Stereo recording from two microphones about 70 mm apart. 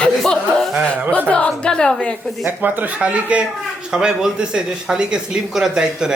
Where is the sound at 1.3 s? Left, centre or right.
Centre.